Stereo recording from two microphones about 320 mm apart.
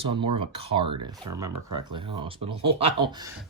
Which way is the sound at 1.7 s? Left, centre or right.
Right.